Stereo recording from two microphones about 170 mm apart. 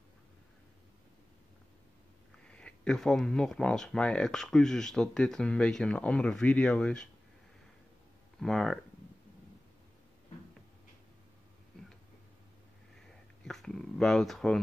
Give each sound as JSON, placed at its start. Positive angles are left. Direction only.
{"t": 2.3, "sound": "speech", "side_deg": 5}
{"t": 8.4, "sound": "speech", "side_deg": 5}
{"t": 13.4, "sound": "speech", "side_deg": 5}